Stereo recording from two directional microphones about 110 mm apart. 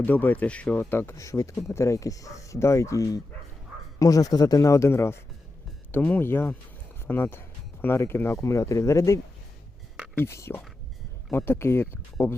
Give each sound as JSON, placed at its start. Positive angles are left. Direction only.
{"t": 0.0, "sound": "speech", "side_deg": 15}